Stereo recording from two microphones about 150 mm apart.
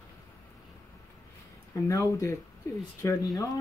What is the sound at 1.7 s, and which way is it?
Speech, 20° left (ahead or behind).